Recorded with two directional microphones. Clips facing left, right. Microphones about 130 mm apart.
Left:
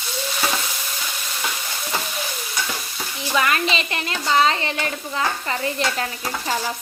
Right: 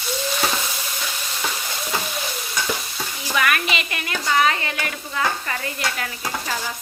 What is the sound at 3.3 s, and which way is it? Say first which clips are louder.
Speech: left 1 dB; 25° left (ahead or behind).